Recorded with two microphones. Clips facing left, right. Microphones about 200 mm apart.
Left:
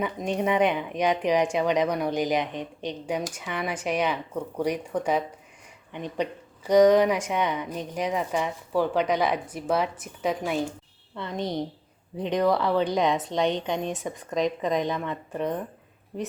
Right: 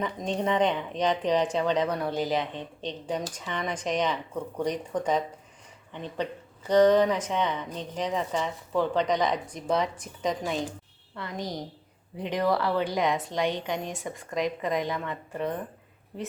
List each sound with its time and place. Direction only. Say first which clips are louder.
0.0 s speech: left 2 dB; 10° left (ahead or behind)
11.2 s speech: left 5 dB; 25° left (ahead or behind)